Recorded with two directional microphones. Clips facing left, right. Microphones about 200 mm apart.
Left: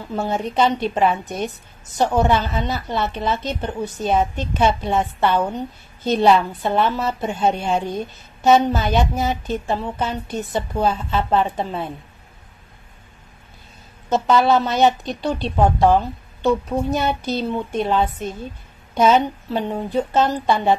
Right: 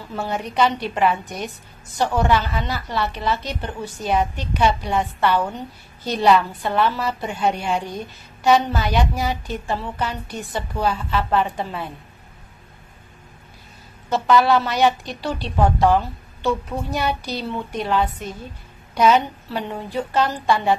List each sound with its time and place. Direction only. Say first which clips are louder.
0.1 s a woman's voice: left 3 dB; 25° left (ahead or behind)
14.0 s a woman's voice: left 1 dB; 20° left (ahead or behind)